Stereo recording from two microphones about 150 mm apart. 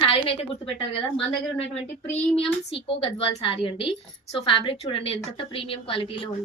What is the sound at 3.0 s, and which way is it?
A woman's voice, 40° left (ahead or behind).